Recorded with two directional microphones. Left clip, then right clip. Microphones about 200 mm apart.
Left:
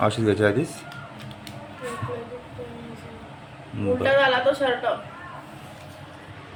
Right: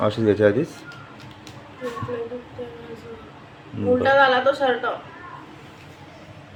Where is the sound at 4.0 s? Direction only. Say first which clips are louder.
Right 2 dB; 10° right (ahead or behind).